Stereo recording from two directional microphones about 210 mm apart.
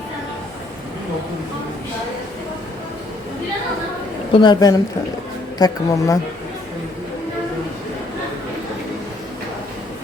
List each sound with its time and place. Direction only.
4.3 s speech: 20° left (ahead or behind)